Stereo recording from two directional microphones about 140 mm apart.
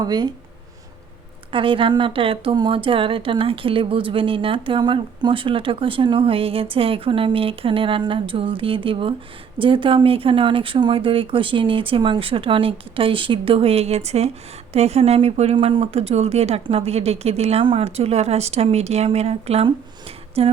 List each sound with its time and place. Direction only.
0.0 s speech: 30° right (ahead or behind)
1.5 s speech: 40° right (ahead or behind)